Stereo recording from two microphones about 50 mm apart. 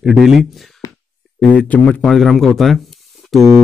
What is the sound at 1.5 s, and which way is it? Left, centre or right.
Speech, left.